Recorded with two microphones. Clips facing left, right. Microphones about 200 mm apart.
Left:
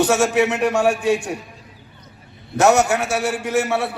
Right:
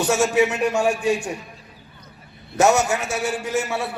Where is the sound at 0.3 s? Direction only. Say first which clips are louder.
Left 1 dB; 65° left (ahead or behind).